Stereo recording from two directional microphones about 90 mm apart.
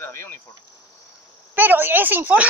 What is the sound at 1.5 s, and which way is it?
Speech, 20° right (ahead or behind).